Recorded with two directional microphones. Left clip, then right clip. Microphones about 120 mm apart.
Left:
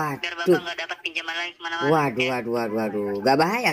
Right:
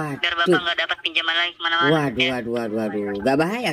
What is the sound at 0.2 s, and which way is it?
Speech, 30° right (ahead or behind).